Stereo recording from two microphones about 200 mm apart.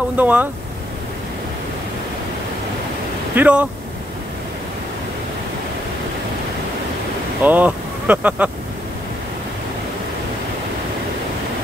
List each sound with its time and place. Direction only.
0.2 s speech: 10° right (ahead or behind)
3.3 s speech: 5° right (ahead or behind)
7.4 s speech: 10° right (ahead or behind)